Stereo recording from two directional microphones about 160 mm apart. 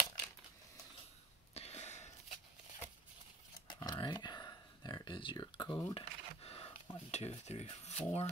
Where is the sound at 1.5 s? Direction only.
40° left (ahead or behind).